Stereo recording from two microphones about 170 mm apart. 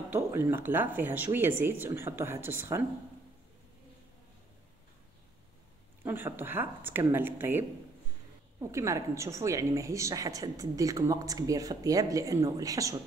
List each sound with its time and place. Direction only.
0.1 s speech: 15° right (ahead or behind)
6.0 s a woman's voice: 10° right (ahead or behind)